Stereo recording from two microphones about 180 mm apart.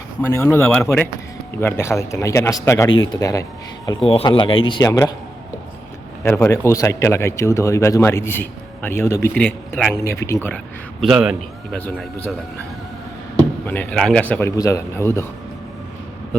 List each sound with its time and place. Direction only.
0.2 s speech: 15° left (ahead or behind)
6.2 s speech: 10° left (ahead or behind)
11.0 s speech: centre (ahead or behind)
11.8 s speech: 10° left (ahead or behind)
13.7 s speech: 5° left (ahead or behind)